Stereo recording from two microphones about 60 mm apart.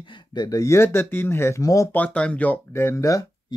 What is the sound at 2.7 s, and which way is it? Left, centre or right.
Speech, left.